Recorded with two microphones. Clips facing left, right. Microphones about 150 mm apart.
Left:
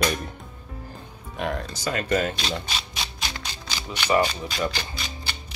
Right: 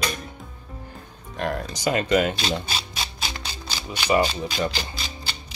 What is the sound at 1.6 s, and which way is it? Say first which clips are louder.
Speech: right 4 dB; 20° right (ahead or behind).